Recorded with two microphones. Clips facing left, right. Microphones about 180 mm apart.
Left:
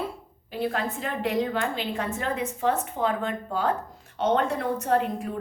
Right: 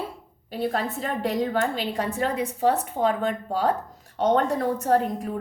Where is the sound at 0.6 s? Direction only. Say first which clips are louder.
Right 2 dB; 40° right (ahead or behind).